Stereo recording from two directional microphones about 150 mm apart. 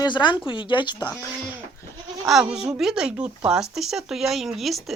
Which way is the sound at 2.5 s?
5° right (ahead or behind).